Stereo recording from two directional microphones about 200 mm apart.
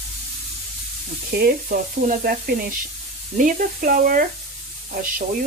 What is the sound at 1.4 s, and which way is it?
Speech, 45° right (ahead or behind).